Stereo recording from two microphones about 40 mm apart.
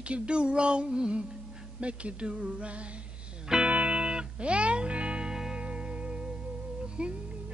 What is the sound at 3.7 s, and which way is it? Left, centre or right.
Music, right.